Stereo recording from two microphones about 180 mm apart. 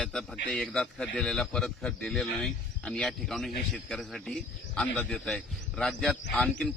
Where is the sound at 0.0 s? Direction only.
5° left (ahead or behind).